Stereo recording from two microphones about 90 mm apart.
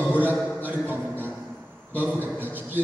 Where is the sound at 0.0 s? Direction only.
20° right (ahead or behind).